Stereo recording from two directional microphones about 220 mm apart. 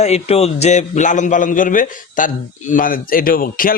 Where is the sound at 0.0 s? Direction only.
30° left (ahead or behind).